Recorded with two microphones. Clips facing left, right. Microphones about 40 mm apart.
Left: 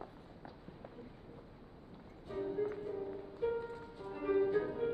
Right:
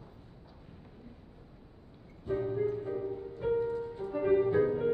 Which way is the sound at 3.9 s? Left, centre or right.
Right.